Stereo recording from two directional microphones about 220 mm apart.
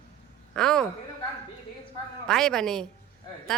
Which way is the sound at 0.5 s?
5° left (ahead or behind).